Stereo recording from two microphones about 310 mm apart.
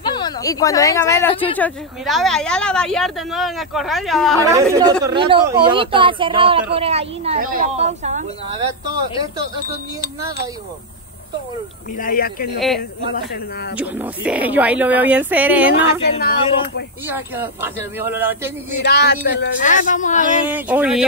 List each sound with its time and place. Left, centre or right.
0.0 s speech: centre
4.4 s a woman's voice: centre
12.0 s speech: left
12.5 s speech: centre
15.7 s speech: left
17.1 s speech: centre
18.8 s speech: left
20.4 s speech: centre